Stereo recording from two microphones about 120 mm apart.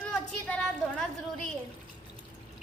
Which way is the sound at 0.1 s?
5° left (ahead or behind).